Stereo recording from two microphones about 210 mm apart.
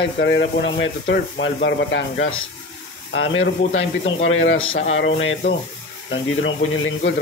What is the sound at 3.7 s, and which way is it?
Speech, 70° left (ahead or behind).